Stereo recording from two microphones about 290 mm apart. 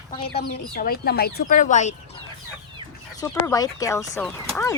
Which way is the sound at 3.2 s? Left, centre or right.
Centre.